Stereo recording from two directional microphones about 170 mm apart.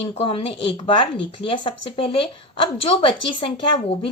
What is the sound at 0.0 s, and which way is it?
A woman's voice, 35° left (ahead or behind).